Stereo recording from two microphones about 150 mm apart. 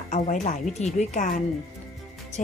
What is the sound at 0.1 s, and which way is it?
Speech, 50° left (ahead or behind).